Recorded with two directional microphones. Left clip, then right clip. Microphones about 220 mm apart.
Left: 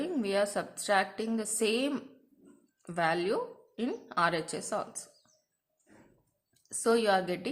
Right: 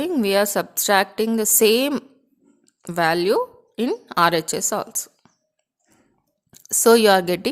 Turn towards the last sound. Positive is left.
turn(degrees=-50)  # may be behind; listen again after turning